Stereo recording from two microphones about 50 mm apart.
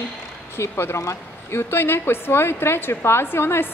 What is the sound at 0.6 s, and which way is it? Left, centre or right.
A woman's voice, left.